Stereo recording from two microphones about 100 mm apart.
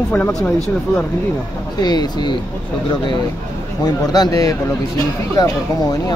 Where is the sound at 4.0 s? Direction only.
40° left (ahead or behind).